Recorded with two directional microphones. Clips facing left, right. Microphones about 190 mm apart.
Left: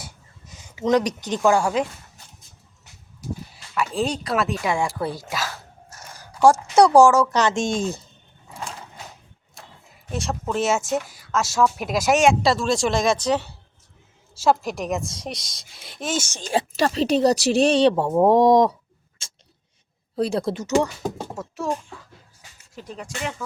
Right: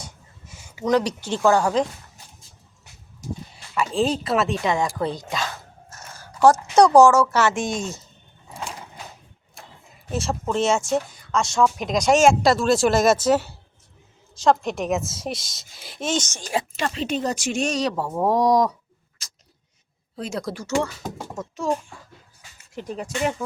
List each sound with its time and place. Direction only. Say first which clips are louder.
0.4 s speech: left 2 dB; 20° left (ahead or behind)
3.8 s speech: right 2 dB; centre (ahead or behind); by 7.8 s 25° left (ahead or behind)
10.1 s speech: right 2 dB; centre (ahead or behind)
16.5 s speech: left 5 dB; 35° left (ahead or behind)
19.2 s tick-tock: left 2 dB; 25° left (ahead or behind)
20.1 s speech: left 6 dB; 35° left (ahead or behind); by 21.4 s 15° left (ahead or behind)
21.6 s speech: right 2 dB; centre (ahead or behind)